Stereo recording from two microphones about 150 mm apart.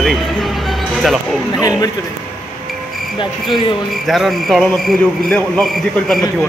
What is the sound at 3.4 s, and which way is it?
A man's voice, centre (ahead or behind).